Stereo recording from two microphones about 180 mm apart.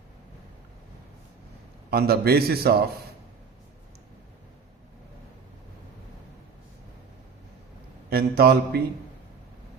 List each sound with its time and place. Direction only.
1.9 s a man's voice: 60° right (ahead or behind)
8.1 s a man's voice: 60° right (ahead or behind)